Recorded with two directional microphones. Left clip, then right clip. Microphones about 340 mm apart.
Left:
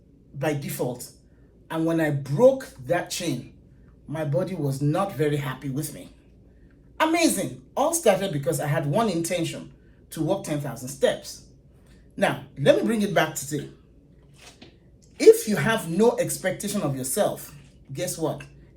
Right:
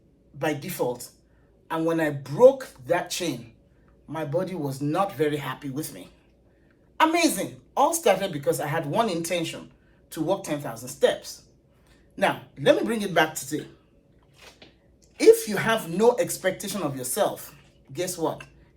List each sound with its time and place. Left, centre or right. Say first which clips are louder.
0.3 s a woman's voice: even; centre
15.2 s a woman's voice: left 1 dB; centre